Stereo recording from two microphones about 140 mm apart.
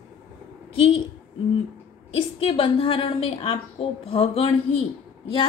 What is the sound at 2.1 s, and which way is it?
A woman's voice, 40° left (ahead or behind).